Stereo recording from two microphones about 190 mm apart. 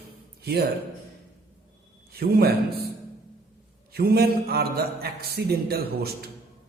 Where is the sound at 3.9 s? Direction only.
55° right (ahead or behind).